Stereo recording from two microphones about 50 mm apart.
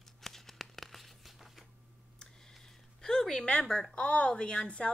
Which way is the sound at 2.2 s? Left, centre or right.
Centre.